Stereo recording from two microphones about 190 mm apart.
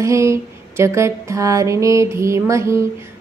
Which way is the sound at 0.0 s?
15° right (ahead or behind).